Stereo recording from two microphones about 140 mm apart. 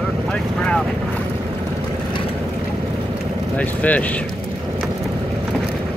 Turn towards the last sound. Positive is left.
turn(degrees=10)  # may be behind; listen again after turning